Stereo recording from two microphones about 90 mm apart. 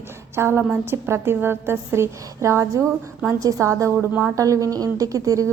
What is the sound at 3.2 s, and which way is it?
Speech, 35° right (ahead or behind).